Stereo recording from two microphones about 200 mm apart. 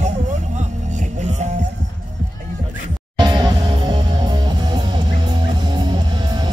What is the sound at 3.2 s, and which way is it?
Music, 20° right (ahead or behind).